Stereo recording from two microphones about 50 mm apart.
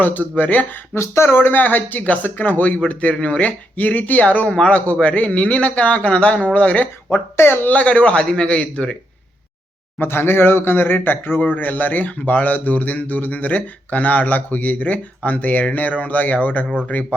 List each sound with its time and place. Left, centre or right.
0.0 s speech: left
0.9 s a man's voice: left
7.3 s speech: left
7.7 s a man's voice: left
10.0 s speech: left